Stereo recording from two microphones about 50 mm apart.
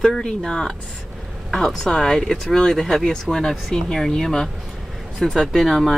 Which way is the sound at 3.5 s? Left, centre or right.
Centre.